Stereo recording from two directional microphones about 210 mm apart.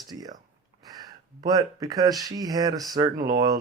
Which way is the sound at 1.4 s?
15° right (ahead or behind).